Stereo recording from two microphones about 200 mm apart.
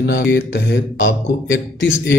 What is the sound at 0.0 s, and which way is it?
Speech, 65° left (ahead or behind).